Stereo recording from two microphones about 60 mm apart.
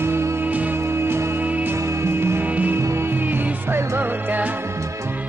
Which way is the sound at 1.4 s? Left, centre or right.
Right.